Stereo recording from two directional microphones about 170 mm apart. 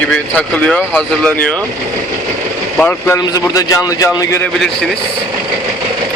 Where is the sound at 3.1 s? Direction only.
20° left (ahead or behind).